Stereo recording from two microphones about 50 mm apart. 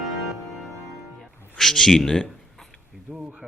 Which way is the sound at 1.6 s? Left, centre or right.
Centre.